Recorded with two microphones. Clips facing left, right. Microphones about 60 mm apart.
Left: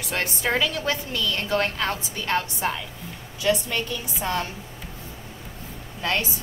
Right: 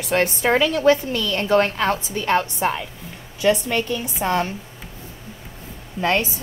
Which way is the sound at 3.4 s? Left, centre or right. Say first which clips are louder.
Right 5 dB; right.